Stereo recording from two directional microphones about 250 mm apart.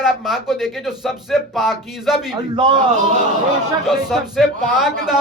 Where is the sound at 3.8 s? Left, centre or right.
Centre.